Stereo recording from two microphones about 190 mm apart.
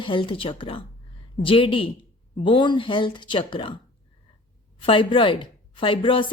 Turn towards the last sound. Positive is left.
turn(degrees=25)  # may be behind; listen again after turning